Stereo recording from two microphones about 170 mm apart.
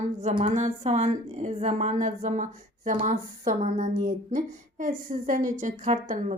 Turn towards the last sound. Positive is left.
turn(degrees=-45)  # may be behind; listen again after turning